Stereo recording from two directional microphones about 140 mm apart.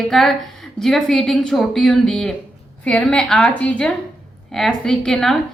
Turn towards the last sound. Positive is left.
turn(degrees=5)  # may be behind; listen again after turning